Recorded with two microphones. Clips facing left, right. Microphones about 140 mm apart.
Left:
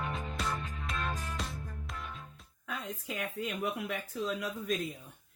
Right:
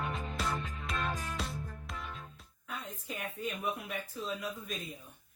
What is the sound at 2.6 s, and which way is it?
Speech, 90° left.